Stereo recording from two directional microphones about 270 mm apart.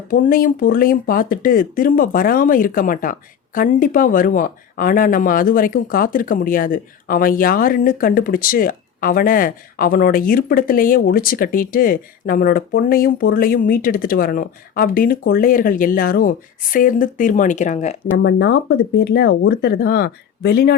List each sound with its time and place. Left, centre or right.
0.1 s a woman's voice: left
18.2 s speech: left